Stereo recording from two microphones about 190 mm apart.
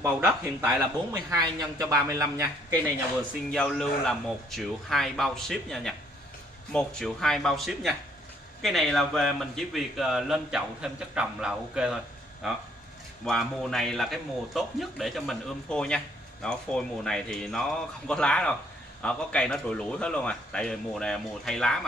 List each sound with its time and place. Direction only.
0.6 s speech: 10° right (ahead or behind)
3.4 s speech: 5° left (ahead or behind)